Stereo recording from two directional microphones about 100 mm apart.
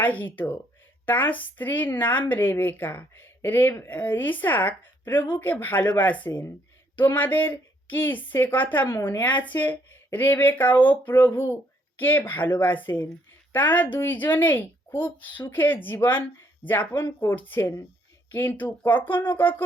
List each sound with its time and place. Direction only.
0.0 s a woman's voice: 20° left (ahead or behind)